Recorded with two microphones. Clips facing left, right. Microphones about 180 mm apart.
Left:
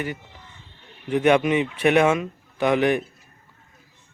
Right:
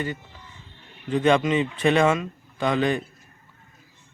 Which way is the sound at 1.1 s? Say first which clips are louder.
Left 2 dB; 15° left (ahead or behind).